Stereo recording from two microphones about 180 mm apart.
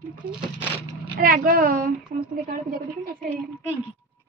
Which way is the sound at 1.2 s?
55° right (ahead or behind).